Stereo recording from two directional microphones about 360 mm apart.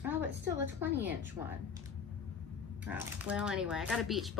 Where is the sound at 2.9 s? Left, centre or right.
Centre.